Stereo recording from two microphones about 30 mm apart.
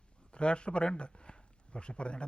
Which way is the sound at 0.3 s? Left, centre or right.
Left.